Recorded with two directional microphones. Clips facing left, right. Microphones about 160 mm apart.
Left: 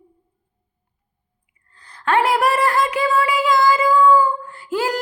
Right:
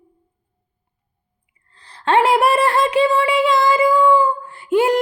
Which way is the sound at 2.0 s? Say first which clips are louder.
Right 3 dB; 25° right (ahead or behind).